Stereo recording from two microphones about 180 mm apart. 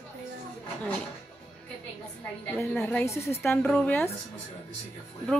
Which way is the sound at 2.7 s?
10° left (ahead or behind).